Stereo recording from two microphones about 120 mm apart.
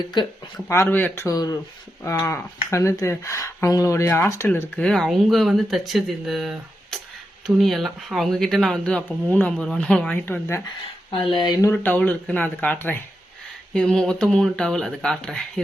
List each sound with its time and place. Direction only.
0.0 s speech: 40° left (ahead or behind)
0.7 s speech: 20° left (ahead or behind)
4.8 s speech: 5° left (ahead or behind)
11.1 s speech: 45° left (ahead or behind)
11.7 s speech: 15° left (ahead or behind)
13.7 s speech: 5° left (ahead or behind)